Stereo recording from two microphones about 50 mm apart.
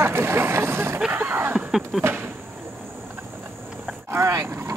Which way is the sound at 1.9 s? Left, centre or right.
Centre.